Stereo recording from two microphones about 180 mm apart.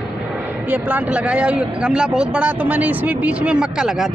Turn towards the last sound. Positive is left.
turn(degrees=-5)  # may be behind; listen again after turning